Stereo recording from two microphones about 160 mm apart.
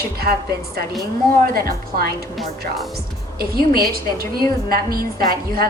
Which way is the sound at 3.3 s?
70° right (ahead or behind).